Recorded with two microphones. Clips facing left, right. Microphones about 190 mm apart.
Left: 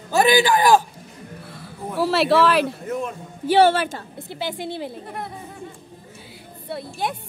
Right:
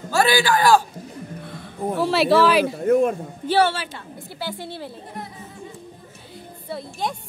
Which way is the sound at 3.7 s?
55° left (ahead or behind).